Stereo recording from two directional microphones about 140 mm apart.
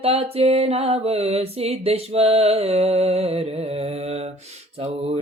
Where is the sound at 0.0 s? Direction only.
45° right (ahead or behind).